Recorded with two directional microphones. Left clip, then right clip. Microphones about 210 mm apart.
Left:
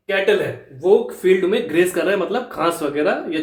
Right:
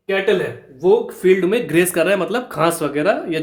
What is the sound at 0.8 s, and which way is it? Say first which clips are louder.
Speech: right 1 dB; 40° right (ahead or behind).